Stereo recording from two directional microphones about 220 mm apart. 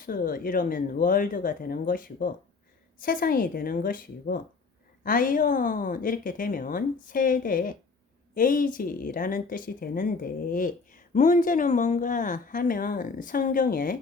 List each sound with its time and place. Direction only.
0.0 s speech: 40° left (ahead or behind)